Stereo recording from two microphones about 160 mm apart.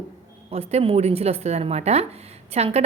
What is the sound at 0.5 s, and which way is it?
A woman's voice, 40° right (ahead or behind).